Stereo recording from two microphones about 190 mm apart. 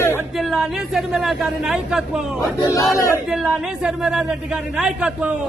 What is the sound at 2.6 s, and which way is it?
Speech, 15° left (ahead or behind).